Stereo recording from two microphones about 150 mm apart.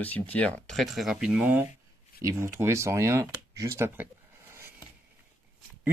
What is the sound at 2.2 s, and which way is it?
Speech, 20° right (ahead or behind).